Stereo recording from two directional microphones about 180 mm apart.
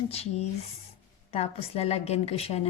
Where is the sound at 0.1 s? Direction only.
35° left (ahead or behind).